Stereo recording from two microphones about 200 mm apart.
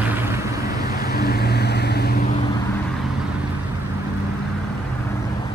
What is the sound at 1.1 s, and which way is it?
Vehicle, 50° left (ahead or behind).